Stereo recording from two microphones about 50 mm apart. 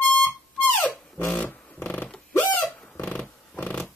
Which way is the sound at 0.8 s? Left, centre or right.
Left.